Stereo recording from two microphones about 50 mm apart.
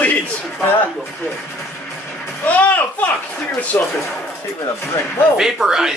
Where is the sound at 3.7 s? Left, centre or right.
Left.